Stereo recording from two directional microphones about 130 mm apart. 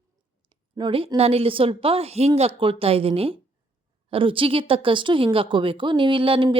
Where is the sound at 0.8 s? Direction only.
45° right (ahead or behind).